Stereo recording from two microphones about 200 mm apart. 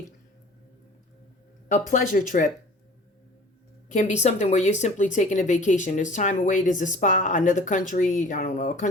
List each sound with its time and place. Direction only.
1.9 s speech: 40° left (ahead or behind)
3.8 s speech: 40° left (ahead or behind)